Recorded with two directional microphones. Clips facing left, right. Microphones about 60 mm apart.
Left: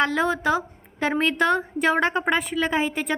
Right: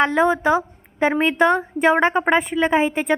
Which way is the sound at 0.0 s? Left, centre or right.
Right.